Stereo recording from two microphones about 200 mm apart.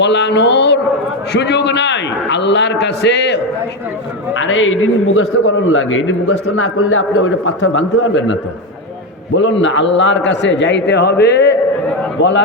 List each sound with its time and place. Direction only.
0.0 s a man's voice: 60° left (ahead or behind)
4.4 s a man's voice: 75° left (ahead or behind)
9.3 s a man's voice: 65° left (ahead or behind)